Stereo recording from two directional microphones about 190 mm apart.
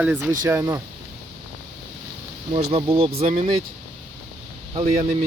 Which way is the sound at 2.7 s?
30° right (ahead or behind).